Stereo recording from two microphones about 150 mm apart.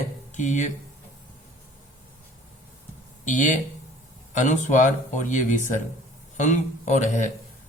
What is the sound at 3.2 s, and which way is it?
Speech, 55° left (ahead or behind).